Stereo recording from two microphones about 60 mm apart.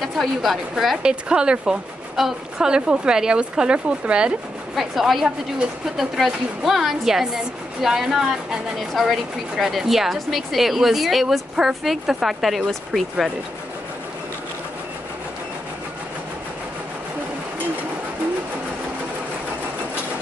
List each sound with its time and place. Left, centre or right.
0.0 s a woman's voice: centre
1.0 s a woman's voice: centre
4.7 s a woman's voice: centre